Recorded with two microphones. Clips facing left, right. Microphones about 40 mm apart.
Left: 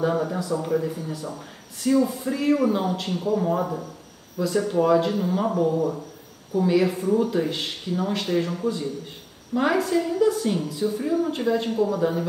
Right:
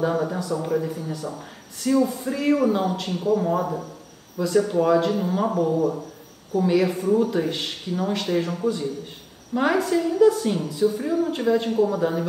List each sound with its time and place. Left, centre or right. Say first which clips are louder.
0.0 s speech: even; centre